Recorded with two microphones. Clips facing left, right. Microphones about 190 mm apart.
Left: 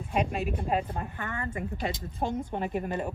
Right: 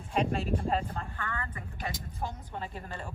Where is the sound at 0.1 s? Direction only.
10° left (ahead or behind).